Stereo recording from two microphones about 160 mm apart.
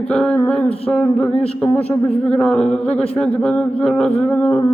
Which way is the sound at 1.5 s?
10° left (ahead or behind).